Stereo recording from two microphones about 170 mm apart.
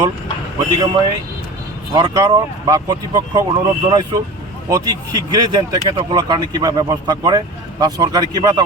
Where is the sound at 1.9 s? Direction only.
20° right (ahead or behind).